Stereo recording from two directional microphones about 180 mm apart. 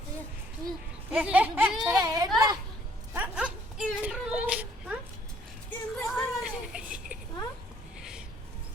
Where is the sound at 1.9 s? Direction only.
20° right (ahead or behind).